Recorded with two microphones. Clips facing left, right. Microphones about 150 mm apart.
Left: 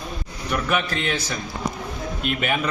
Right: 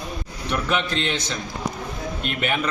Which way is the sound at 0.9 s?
25° right (ahead or behind).